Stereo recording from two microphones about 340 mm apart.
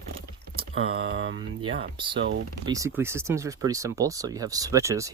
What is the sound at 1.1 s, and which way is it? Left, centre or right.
Speech, right.